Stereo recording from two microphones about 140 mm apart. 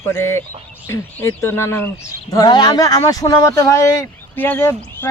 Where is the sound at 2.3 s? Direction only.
30° left (ahead or behind); by 5.0 s 15° left (ahead or behind).